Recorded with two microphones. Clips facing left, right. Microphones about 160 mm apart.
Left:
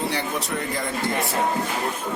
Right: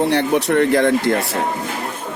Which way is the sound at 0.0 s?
65° right (ahead or behind).